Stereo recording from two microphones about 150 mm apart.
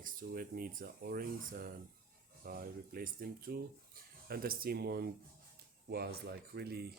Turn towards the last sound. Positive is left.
turn(degrees=-90)